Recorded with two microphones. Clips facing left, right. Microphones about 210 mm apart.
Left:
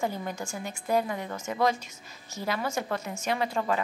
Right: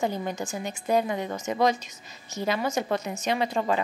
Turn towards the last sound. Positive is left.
turn(degrees=-20)  # may be behind; listen again after turning